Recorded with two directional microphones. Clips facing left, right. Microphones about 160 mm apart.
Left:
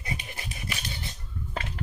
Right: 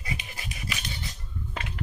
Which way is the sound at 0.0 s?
25° left (ahead or behind).